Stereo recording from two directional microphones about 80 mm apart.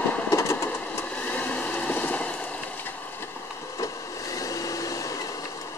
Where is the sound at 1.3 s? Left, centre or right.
Left.